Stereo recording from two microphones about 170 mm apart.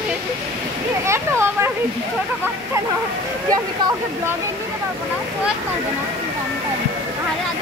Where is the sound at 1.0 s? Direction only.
15° right (ahead or behind).